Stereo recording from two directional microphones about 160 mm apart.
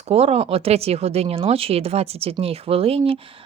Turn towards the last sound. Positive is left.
turn(degrees=-35)  # may be behind; listen again after turning